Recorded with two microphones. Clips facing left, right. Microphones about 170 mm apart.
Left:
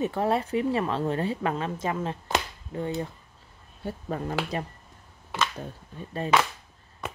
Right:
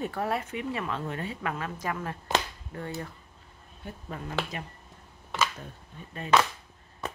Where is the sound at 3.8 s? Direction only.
35° left (ahead or behind).